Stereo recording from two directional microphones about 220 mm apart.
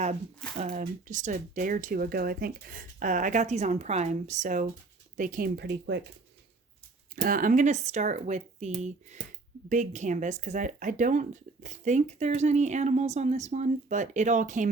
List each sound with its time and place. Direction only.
0.0 s speech: 30° right (ahead or behind); by 6.0 s 50° right (ahead or behind)
7.2 s speech: 40° right (ahead or behind)